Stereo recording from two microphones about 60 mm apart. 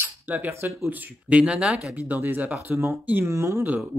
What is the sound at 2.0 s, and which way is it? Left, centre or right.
Speech, right.